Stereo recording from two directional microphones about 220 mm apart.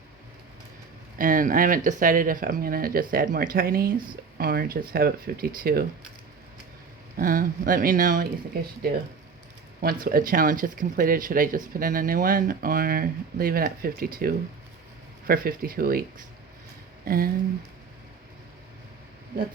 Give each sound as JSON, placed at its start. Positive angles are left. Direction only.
{"t": 1.2, "sound": "speech", "side_deg": -40}
{"t": 7.2, "sound": "speech", "side_deg": -40}
{"t": 9.8, "sound": "speech", "side_deg": -40}